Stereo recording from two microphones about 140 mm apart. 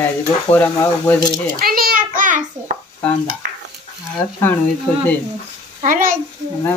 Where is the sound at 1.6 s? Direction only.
90° right; by 2.4 s 70° right (ahead or behind).